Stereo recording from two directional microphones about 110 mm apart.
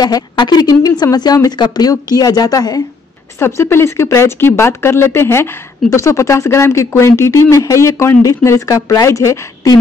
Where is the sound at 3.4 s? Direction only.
25° left (ahead or behind).